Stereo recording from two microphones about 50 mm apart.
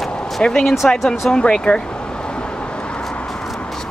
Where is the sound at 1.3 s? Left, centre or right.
Centre.